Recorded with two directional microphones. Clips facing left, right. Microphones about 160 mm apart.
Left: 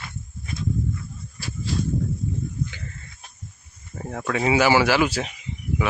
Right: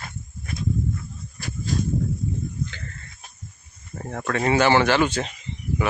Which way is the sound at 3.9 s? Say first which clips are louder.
Even; 5° left (ahead or behind).